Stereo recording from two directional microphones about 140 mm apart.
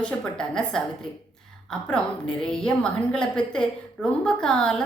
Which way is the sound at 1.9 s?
5° left (ahead or behind).